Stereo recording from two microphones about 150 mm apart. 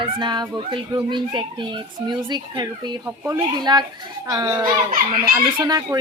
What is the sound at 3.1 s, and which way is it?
Speech, 15° right (ahead or behind).